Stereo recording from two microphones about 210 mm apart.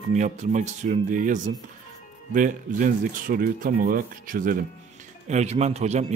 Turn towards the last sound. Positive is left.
turn(degrees=-30)  # may be behind; listen again after turning